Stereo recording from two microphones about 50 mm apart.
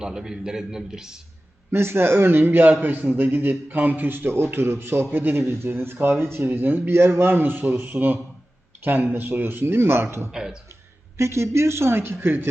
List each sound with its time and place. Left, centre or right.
0.0 s a man's voice: centre
1.7 s speech: right
11.2 s a woman's voice: right